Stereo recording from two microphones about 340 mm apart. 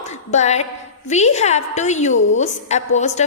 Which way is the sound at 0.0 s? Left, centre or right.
Centre.